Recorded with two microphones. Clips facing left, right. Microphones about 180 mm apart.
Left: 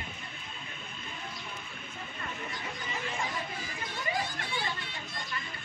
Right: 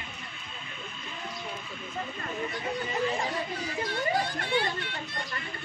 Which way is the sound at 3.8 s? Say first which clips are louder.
Right 6 dB; 65° right (ahead or behind).